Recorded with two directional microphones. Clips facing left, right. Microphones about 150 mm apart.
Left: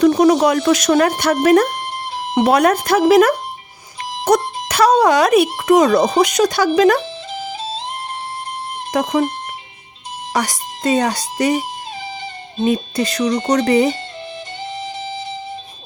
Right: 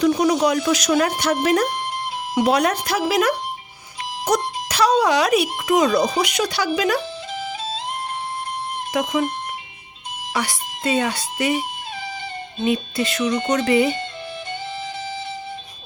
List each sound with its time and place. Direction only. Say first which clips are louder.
0.0 s speech: left 5 dB; 50° left (ahead or behind)
8.9 s speech: left 4 dB; 40° left (ahead or behind)
10.3 s speech: left 4 dB; 40° left (ahead or behind)
14.8 s music: left 2 dB; 30° left (ahead or behind)